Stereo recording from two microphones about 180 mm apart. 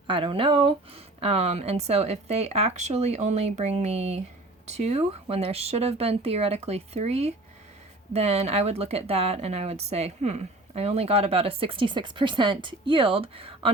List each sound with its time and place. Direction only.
0.1 s speech: 30° right (ahead or behind)